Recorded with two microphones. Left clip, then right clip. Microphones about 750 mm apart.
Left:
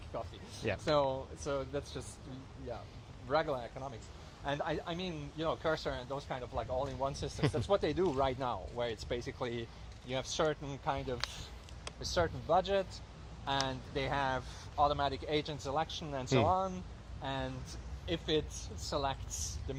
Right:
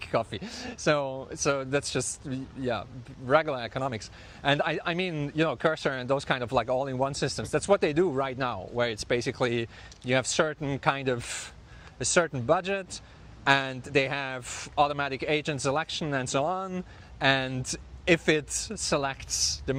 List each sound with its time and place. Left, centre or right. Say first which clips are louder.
0.1 s speech: right 14 dB; right
0.9 s speech: right 6 dB; right
3.2 s speech: right 9 dB; right
13.4 s speech: right 11 dB; right
17.2 s speech: right 15 dB; right
18.9 s a man's voice: right 7 dB; right